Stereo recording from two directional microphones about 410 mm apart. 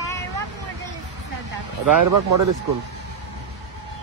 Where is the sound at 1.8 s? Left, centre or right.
Right.